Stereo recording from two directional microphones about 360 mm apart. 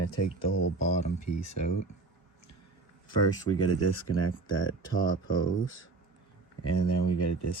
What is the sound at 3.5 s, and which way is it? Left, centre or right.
Speech, left.